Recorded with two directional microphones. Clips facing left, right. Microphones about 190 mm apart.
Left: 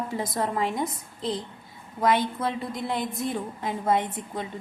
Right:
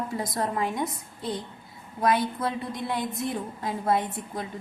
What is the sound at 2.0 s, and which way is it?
A woman's voice, 20° left (ahead or behind).